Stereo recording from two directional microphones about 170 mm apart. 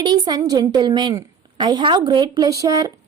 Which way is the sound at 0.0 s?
25° right (ahead or behind).